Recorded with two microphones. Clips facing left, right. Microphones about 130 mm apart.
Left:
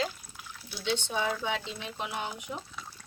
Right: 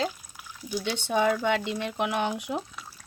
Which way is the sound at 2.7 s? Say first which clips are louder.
Even; 10° right (ahead or behind).